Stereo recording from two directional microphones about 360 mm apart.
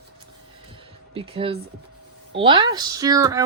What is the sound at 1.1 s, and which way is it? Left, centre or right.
Speech, centre.